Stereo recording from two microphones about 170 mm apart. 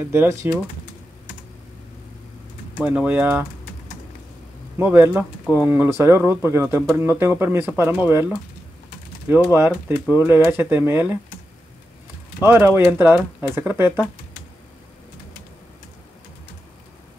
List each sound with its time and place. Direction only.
0.1 s speech: 15° right (ahead or behind)
2.8 s speech: 5° right (ahead or behind)
4.7 s speech: 10° right (ahead or behind)
9.5 s speech: 10° right (ahead or behind)
12.4 s speech: 10° right (ahead or behind)